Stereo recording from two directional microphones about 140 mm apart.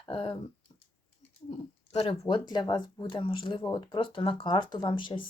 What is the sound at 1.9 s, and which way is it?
Speech, 45° left (ahead or behind).